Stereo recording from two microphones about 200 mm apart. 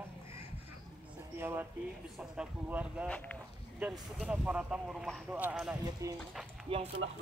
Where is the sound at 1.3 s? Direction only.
10° right (ahead or behind).